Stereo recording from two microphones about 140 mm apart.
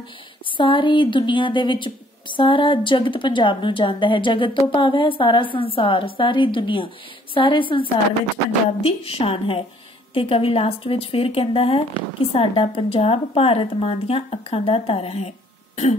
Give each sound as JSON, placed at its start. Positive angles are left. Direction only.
{"t": 0.6, "sound": "a woman's voice", "side_deg": 35}